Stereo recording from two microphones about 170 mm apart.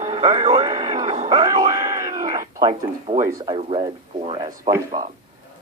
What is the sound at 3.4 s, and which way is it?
Speech, 30° right (ahead or behind).